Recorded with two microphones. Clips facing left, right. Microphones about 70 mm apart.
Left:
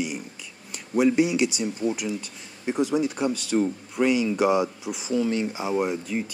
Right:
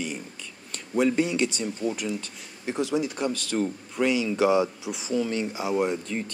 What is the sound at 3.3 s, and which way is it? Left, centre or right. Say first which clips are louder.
Speech: left 3 dB; centre.